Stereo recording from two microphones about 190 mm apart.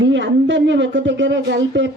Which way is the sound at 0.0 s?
70° right (ahead or behind).